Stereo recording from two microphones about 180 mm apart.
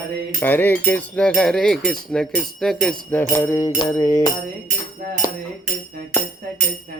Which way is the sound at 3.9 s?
15° left (ahead or behind).